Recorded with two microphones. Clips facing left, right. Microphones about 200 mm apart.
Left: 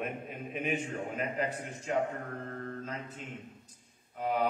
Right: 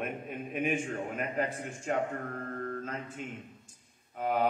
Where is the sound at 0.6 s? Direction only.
50° right (ahead or behind).